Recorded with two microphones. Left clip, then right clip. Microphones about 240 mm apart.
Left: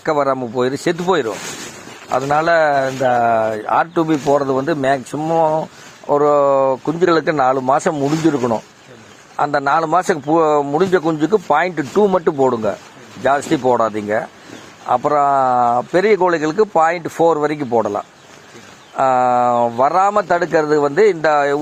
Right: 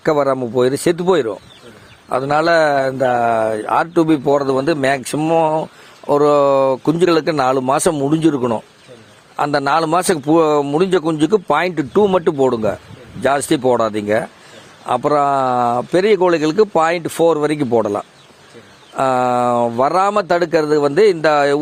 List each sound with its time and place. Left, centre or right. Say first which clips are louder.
0.0 s speech: right 1 dB; right